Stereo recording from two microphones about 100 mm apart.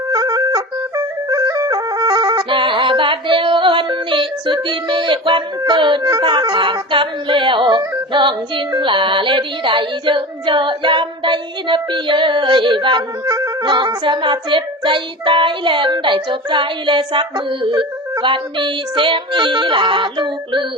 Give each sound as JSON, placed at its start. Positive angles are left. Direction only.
{"t": 0.1, "sound": "music", "side_deg": -40}
{"t": 2.5, "sound": "music", "side_deg": -55}
{"t": 6.0, "sound": "speech", "side_deg": -30}
{"t": 6.2, "sound": "music", "side_deg": -50}
{"t": 8.1, "sound": "child singing", "side_deg": -55}
{"t": 13.2, "sound": "music", "side_deg": -35}
{"t": 13.7, "sound": "child singing", "side_deg": -50}